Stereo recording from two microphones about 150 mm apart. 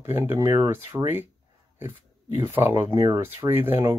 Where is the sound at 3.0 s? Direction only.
20° right (ahead or behind).